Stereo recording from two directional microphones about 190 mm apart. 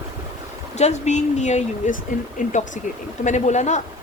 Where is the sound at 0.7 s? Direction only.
35° left (ahead or behind).